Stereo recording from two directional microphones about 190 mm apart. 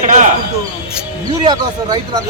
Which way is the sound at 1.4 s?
20° right (ahead or behind).